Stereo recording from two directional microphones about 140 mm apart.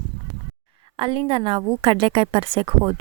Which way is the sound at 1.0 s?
40° right (ahead or behind).